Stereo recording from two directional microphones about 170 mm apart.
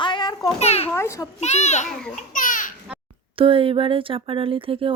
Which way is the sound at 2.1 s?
50° left (ahead or behind).